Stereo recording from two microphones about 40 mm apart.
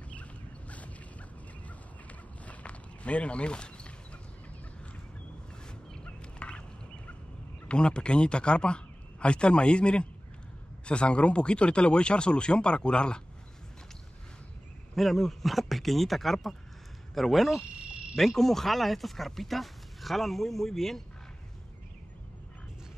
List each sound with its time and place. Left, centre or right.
0.1 s boat: left
2.0 s walk: left
6.0 s fowl: left
7.6 s speech: left
15.0 s speech: centre